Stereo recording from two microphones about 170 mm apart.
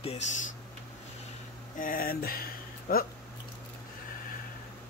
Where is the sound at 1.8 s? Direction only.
55° left (ahead or behind).